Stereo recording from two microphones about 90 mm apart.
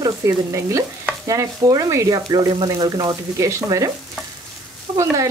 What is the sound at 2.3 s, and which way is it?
Speech, 45° right (ahead or behind).